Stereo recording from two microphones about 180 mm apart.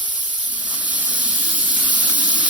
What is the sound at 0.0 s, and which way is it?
Steam, 10° right (ahead or behind).